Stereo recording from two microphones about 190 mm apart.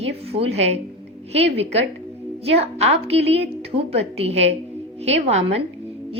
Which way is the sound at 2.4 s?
30° right (ahead or behind).